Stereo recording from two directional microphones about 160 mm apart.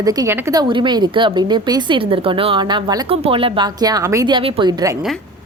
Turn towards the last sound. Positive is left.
turn(degrees=-25)  # may be behind; listen again after turning